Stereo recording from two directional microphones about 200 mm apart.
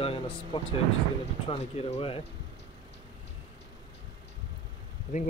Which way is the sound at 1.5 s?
30° left (ahead or behind).